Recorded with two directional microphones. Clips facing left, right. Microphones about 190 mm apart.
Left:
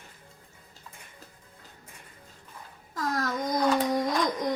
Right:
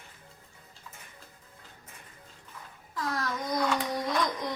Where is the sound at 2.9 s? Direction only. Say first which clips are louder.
Left 3 dB; 40° left (ahead or behind).